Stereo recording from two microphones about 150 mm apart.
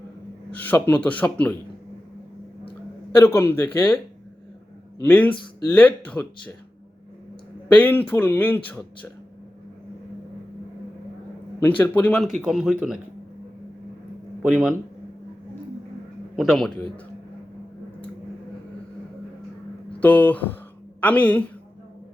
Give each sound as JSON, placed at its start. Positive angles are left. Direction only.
{"t": 0.5, "sound": "speech", "side_deg": 10}
{"t": 3.2, "sound": "speech", "side_deg": 15}
{"t": 4.9, "sound": "speech", "side_deg": 15}
{"t": 7.7, "sound": "speech", "side_deg": 10}
{"t": 11.8, "sound": "speech", "side_deg": 10}
{"t": 12.2, "sound": "a man's voice", "side_deg": 0}
{"t": 14.4, "sound": "a man's voice", "side_deg": -5}
{"t": 16.3, "sound": "a man's voice", "side_deg": 0}
{"t": 20.0, "sound": "speech", "side_deg": 10}